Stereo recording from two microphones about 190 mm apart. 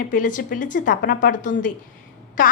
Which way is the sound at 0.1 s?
45° left (ahead or behind).